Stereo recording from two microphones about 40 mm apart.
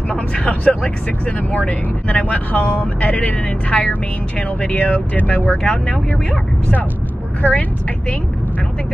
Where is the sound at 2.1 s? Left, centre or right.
Left.